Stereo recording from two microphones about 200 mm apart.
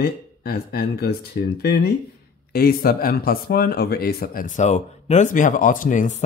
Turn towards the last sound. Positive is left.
turn(degrees=40)  # may be behind; listen again after turning